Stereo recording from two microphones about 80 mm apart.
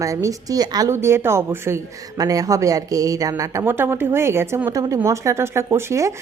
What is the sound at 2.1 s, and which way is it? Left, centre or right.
A woman's voice, right.